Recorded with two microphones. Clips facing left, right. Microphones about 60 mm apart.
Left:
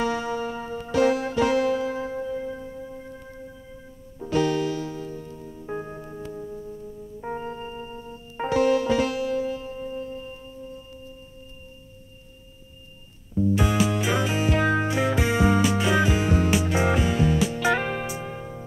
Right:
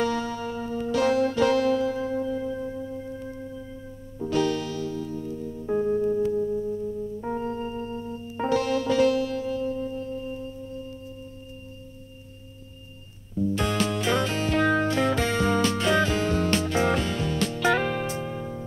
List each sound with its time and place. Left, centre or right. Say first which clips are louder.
0.0 s music: left 1 dB; centre
4.3 s music: left 2 dB; centre
7.2 s organ: even; left
8.0 s music: right 2 dB; centre
13.4 s music: left 3 dB; centre